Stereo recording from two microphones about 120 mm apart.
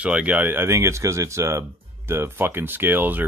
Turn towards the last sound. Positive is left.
turn(degrees=-15)  # may be behind; listen again after turning